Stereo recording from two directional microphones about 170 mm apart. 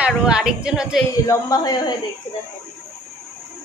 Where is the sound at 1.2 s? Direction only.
20° left (ahead or behind).